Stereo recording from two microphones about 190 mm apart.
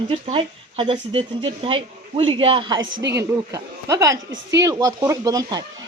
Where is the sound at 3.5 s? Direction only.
15° right (ahead or behind).